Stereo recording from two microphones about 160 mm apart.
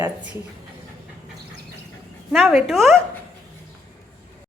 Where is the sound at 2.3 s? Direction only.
Centre (ahead or behind).